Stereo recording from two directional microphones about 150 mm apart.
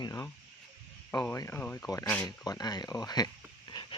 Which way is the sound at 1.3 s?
20° left (ahead or behind).